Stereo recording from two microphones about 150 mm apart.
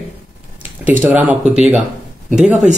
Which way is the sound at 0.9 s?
10° right (ahead or behind).